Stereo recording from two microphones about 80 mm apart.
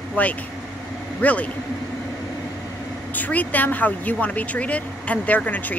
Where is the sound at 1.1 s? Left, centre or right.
Centre.